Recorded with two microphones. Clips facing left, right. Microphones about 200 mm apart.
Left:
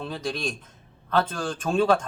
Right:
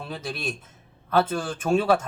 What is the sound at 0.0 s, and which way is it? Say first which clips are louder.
Speech: left 2 dB; 5° right (ahead or behind).